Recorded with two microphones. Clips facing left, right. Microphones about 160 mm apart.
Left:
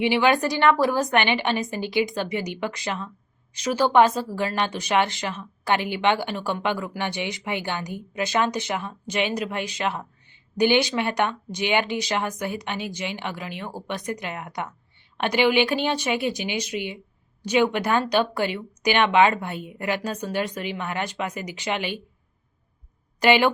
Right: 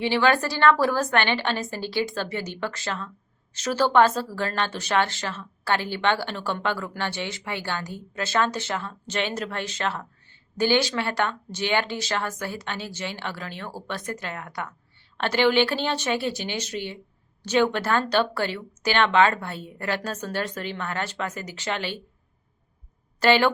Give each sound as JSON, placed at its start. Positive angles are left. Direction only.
{"t": 0.0, "sound": "speech", "side_deg": 15}
{"t": 23.2, "sound": "speech", "side_deg": 15}